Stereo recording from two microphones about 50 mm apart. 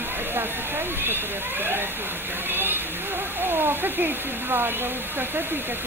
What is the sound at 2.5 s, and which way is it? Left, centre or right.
Speech, right.